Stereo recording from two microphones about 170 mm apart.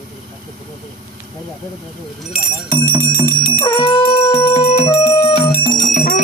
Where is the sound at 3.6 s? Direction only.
30° left (ahead or behind).